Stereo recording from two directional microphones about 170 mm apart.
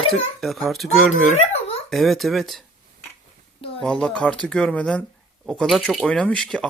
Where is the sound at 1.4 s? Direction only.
35° left (ahead or behind).